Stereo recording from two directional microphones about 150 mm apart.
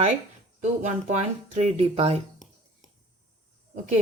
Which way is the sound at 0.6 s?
50° right (ahead or behind).